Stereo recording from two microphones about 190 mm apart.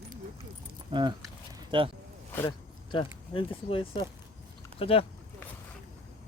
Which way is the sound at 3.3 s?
30° left (ahead or behind).